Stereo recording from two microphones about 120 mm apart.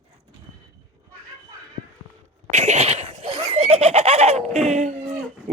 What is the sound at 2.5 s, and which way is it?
Giggle, 70° right (ahead or behind).